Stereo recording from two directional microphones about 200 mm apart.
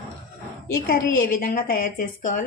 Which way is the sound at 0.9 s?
45° left (ahead or behind).